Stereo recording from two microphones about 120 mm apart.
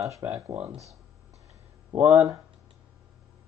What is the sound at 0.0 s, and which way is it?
Speech, 25° right (ahead or behind).